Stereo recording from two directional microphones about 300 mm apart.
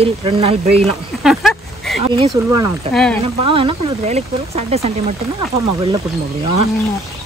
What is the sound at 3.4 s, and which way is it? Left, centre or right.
Speech, centre.